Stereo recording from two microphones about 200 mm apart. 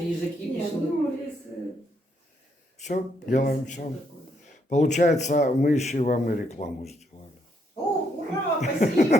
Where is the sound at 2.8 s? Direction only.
40° left (ahead or behind).